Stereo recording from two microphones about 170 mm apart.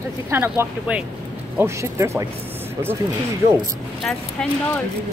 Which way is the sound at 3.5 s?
5° left (ahead or behind).